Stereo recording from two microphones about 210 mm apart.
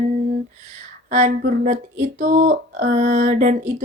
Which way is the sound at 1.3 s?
45° right (ahead or behind).